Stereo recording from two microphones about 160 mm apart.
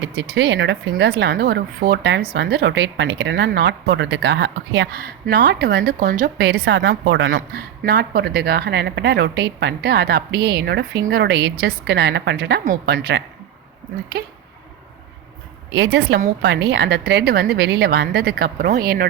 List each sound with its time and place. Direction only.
0.0 s speech: 90° right
12.6 s speech: 75° right (ahead or behind)
15.7 s speech: 90° right; by 19.0 s 70° right (ahead or behind)